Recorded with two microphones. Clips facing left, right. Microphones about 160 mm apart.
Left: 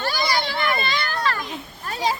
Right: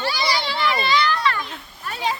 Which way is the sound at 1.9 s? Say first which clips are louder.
Left 1 dB; 40° left (ahead or behind).